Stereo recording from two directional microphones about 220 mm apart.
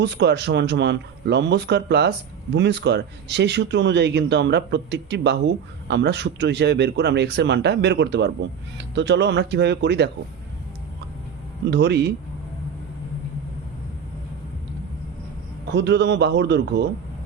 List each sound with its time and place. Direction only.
0.0 s speech: 50° right (ahead or behind)
11.7 s speech: 50° right (ahead or behind)
15.7 s speech: 50° right (ahead or behind)